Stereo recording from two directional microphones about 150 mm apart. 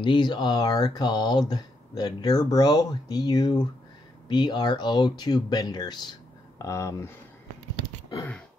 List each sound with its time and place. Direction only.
0.0 s speech: 30° left (ahead or behind)